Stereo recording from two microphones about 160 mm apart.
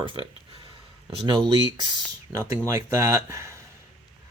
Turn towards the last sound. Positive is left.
turn(degrees=-15)  # may be behind; listen again after turning